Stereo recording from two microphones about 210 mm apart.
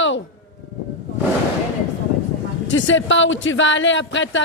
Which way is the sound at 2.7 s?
65° left (ahead or behind).